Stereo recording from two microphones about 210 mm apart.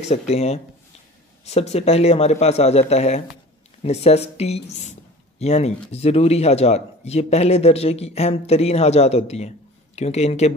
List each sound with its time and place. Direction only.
0.0 s speech: 30° left (ahead or behind)